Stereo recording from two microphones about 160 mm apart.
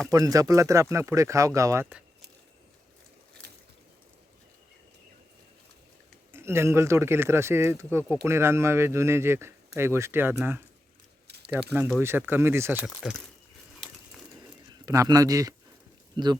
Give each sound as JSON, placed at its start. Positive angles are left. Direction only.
{"t": 0.1, "sound": "speech", "side_deg": -20}
{"t": 3.4, "sound": "a sound", "side_deg": -90}
{"t": 6.3, "sound": "speech", "side_deg": -15}
{"t": 11.7, "sound": "speech", "side_deg": -10}
{"t": 13.0, "sound": "speech", "side_deg": 0}
{"t": 14.8, "sound": "speech", "side_deg": -20}